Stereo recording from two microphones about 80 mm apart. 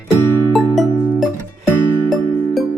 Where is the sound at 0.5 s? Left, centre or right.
Centre.